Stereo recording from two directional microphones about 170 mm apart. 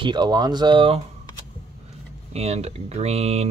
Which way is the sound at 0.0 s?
25° right (ahead or behind).